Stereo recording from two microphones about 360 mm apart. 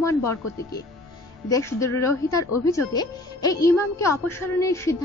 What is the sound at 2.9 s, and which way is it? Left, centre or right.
A woman's voice, centre.